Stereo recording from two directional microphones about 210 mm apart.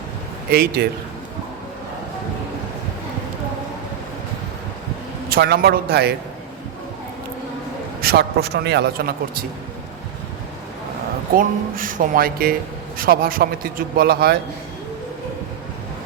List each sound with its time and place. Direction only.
0.5 s a man's voice: 45° right (ahead or behind)
5.3 s a man's voice: 50° right (ahead or behind)
8.0 s a man's voice: 50° right (ahead or behind)
11.3 s a man's voice: 40° right (ahead or behind)